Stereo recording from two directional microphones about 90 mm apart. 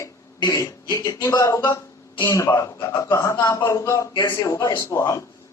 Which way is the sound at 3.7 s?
35° left (ahead or behind).